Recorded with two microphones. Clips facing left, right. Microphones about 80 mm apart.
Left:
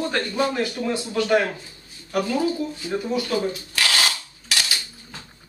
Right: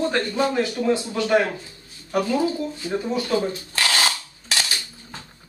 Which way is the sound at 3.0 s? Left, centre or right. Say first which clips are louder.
Right 1 dB; right.